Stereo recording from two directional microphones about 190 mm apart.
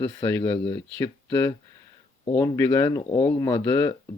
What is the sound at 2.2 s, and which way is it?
Speech, 15° left (ahead or behind).